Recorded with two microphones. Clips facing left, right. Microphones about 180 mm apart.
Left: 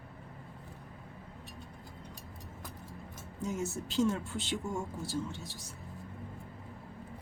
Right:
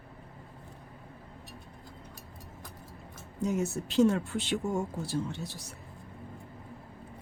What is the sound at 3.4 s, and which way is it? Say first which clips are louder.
Speech: right 5 dB; 65° right (ahead or behind).